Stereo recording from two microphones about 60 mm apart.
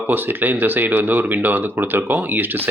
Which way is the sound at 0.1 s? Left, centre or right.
Right.